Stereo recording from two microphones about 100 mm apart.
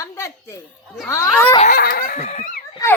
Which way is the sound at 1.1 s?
25° left (ahead or behind).